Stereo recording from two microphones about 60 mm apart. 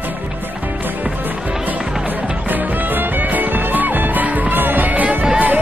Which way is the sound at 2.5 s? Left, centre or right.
Right.